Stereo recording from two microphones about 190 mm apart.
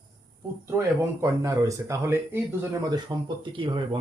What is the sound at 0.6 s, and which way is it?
Speech, 15° right (ahead or behind).